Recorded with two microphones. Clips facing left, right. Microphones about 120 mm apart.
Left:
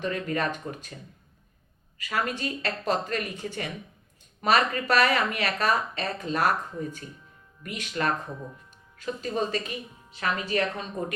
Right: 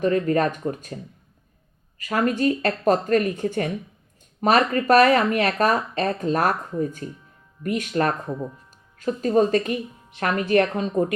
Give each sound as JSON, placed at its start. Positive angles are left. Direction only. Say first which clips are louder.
{"t": 0.0, "sound": "speech", "louder": "right 8 dB", "side_deg": -40}
{"t": 2.0, "sound": "speech", "louder": "right 8 dB", "side_deg": -45}